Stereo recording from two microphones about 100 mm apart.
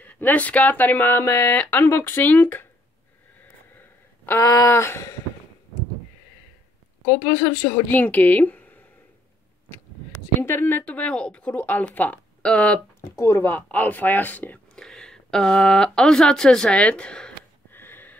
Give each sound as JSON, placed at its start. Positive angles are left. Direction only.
{"t": 0.0, "sound": "speech", "side_deg": 15}
{"t": 4.3, "sound": "speech", "side_deg": 35}
{"t": 7.1, "sound": "speech", "side_deg": 25}
{"t": 8.0, "sound": "speech", "side_deg": 15}
{"t": 10.4, "sound": "speech", "side_deg": 20}
{"t": 13.2, "sound": "speech", "side_deg": 25}
{"t": 17.6, "sound": "a sound", "side_deg": 20}